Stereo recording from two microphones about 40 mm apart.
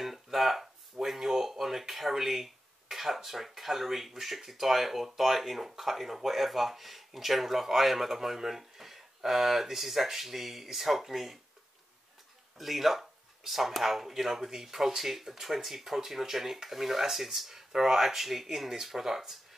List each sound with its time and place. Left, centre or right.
0.0 s a sound: centre
1.0 s speech: centre
12.5 s speech: centre